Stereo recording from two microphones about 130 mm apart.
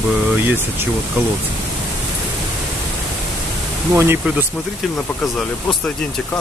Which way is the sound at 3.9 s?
20° right (ahead or behind).